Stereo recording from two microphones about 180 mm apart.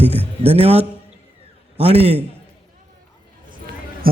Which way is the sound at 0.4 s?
35° right (ahead or behind).